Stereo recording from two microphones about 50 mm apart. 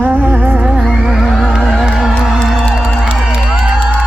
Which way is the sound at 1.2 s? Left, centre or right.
Centre.